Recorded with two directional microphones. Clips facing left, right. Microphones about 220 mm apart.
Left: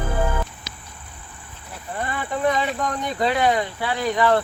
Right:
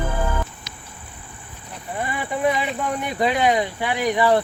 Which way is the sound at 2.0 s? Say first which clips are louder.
Right 1 dB; 10° right (ahead or behind).